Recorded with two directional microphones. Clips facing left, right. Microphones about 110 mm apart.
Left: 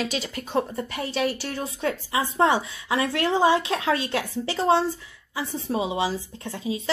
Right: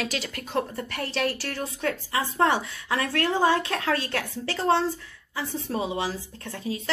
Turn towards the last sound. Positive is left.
turn(degrees=15)  # may be behind; listen again after turning